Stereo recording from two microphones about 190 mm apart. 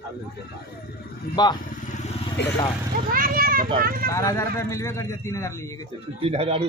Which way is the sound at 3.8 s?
50° right (ahead or behind).